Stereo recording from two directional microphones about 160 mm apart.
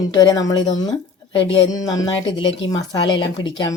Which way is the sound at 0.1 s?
25° left (ahead or behind).